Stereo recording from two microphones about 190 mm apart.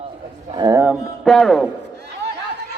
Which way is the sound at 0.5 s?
20° right (ahead or behind).